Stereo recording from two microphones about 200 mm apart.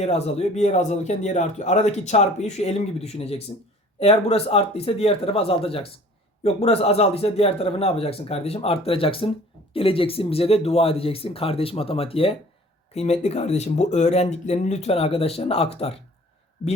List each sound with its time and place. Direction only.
0.0 s speech: 30° left (ahead or behind)